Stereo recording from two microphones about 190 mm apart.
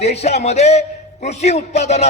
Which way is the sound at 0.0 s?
35° left (ahead or behind).